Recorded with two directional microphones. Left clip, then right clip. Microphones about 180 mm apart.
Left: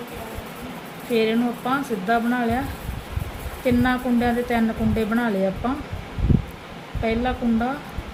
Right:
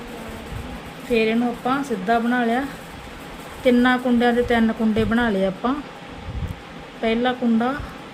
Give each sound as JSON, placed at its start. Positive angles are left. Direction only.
{"t": 1.1, "sound": "speech", "side_deg": -10}
{"t": 3.7, "sound": "a woman's voice", "side_deg": -25}
{"t": 7.0, "sound": "a woman's voice", "side_deg": -25}